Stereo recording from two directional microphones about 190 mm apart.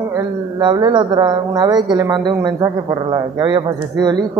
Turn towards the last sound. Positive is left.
turn(degrees=-20)  # may be behind; listen again after turning